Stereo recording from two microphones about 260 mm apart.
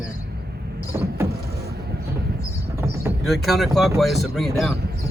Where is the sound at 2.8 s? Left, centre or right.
Centre.